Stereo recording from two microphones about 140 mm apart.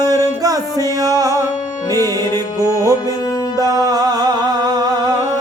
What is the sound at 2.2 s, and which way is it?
Music, 20° left (ahead or behind).